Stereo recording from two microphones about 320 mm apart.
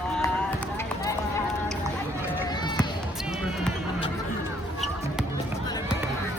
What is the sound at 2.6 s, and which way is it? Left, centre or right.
Run, centre.